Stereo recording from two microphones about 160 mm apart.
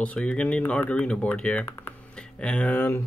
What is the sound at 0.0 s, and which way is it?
Speech, 5° left (ahead or behind).